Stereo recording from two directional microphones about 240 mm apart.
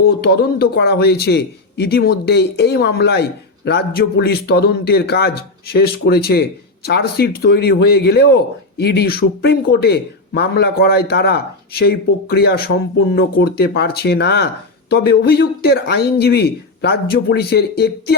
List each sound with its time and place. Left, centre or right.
0.0 s a man's voice: left